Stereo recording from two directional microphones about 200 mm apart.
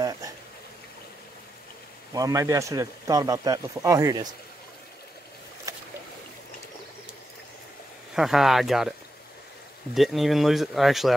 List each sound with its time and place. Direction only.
2.1 s a man's voice: 15° right (ahead or behind)
8.1 s speech: centre (ahead or behind)
9.9 s speech: centre (ahead or behind)